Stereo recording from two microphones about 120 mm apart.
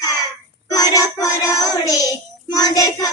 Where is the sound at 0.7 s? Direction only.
30° left (ahead or behind).